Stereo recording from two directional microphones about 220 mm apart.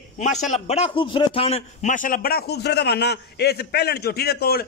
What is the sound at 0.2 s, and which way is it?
A man's voice, 35° left (ahead or behind).